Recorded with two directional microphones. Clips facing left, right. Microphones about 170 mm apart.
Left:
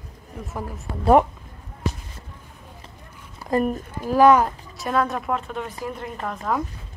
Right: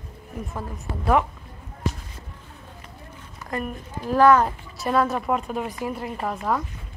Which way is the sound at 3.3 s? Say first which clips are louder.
Left 8 dB; 35° left (ahead or behind).